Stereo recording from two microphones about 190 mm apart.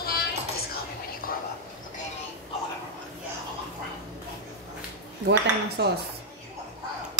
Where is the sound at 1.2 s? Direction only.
50° left (ahead or behind).